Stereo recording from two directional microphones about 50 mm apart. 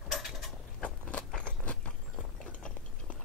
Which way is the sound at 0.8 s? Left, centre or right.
Left.